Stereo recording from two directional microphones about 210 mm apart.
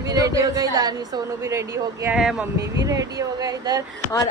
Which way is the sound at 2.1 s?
5° right (ahead or behind).